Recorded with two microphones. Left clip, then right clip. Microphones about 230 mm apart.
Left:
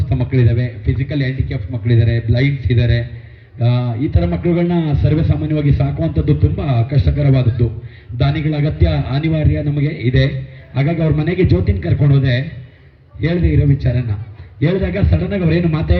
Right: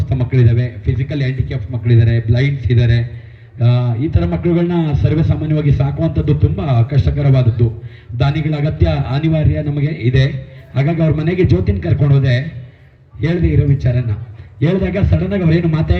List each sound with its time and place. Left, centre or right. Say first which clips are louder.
0.1 s a man's voice: even; right